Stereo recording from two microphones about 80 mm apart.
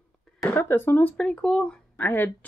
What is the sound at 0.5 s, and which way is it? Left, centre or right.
Speech, left.